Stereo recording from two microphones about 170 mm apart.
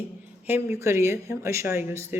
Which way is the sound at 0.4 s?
15° right (ahead or behind).